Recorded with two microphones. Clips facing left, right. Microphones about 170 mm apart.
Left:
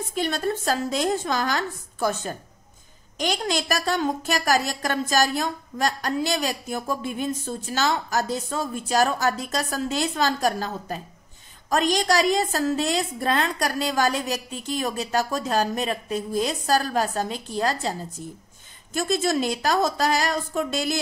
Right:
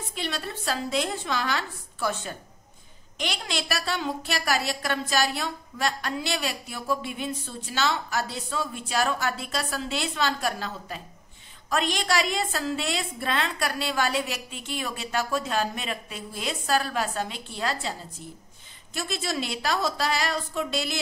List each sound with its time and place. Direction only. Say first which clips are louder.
0.1 s a woman's voice: left 8 dB; 45° left (ahead or behind)
18.9 s a woman's voice: left 7 dB; 45° left (ahead or behind)